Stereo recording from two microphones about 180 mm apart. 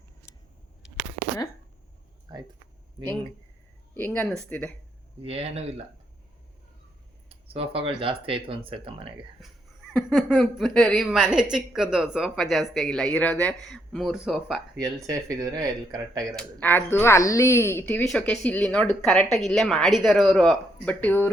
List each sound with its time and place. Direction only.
2.3 s speech: 20° right (ahead or behind)
3.9 s speech: 10° left (ahead or behind)
5.2 s speech: 35° right (ahead or behind)
7.3 s speech: 30° right (ahead or behind)
10.1 s speech: centre (ahead or behind)
14.8 s speech: 20° right (ahead or behind)
16.4 s speech: 10° left (ahead or behind)